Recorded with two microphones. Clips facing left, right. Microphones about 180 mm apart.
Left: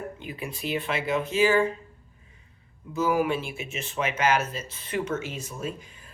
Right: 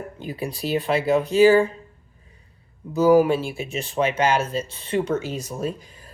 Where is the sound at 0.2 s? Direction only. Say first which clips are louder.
Right 6 dB; 35° right (ahead or behind).